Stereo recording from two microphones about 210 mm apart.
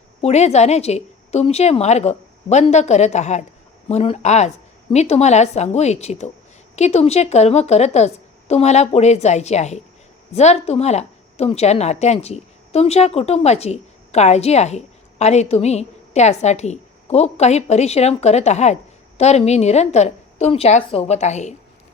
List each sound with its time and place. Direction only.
0.2 s a woman's voice: 30° left (ahead or behind)